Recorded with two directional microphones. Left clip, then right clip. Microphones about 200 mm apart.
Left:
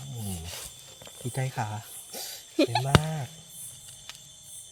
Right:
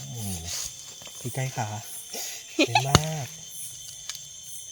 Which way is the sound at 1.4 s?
30° right (ahead or behind).